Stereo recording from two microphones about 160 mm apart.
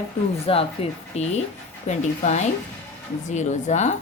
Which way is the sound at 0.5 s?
35° left (ahead or behind).